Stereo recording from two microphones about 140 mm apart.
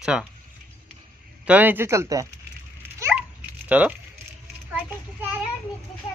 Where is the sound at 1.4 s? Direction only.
10° right (ahead or behind).